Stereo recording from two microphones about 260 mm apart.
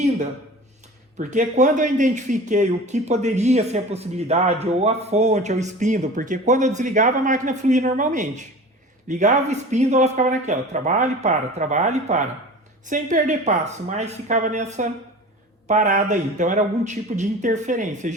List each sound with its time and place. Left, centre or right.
1.2 s speech: right